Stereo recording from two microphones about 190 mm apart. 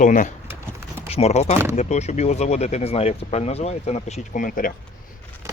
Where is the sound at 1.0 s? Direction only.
30° left (ahead or behind).